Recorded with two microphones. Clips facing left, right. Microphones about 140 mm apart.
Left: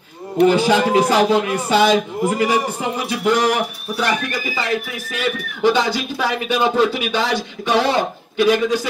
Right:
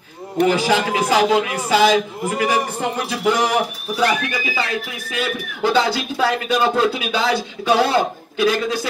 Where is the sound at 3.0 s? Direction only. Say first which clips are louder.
Left 2 dB; 5° right (ahead or behind).